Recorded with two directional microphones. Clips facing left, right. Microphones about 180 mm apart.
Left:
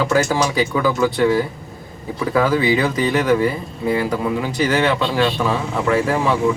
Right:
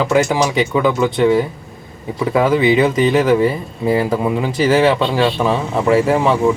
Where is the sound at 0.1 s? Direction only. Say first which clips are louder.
Right 3 dB; 20° right (ahead or behind).